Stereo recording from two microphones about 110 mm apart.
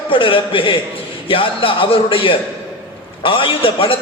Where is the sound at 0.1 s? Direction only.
50° left (ahead or behind).